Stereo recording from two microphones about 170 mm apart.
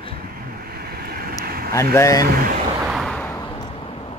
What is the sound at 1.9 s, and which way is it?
Speech, 20° left (ahead or behind).